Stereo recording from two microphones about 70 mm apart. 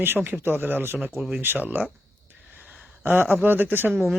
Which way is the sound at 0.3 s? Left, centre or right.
Right.